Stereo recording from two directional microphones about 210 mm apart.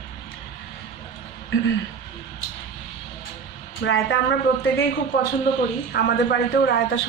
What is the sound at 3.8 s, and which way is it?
Speech, 50° left (ahead or behind).